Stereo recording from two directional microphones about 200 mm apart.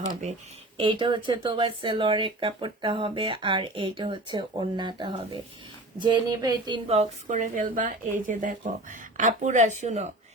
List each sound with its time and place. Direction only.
0.8 s a woman's voice: 25° right (ahead or behind)